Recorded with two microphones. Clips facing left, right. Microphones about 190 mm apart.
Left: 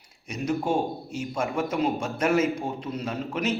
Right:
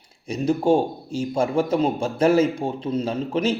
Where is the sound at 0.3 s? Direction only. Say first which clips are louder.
Right 7 dB; 30° right (ahead or behind).